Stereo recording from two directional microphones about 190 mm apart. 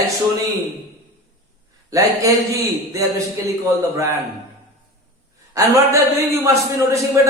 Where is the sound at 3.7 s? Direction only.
15° right (ahead or behind).